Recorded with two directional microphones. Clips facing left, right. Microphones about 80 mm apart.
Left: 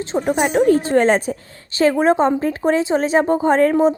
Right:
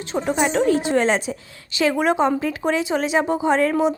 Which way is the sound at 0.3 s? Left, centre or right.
Left.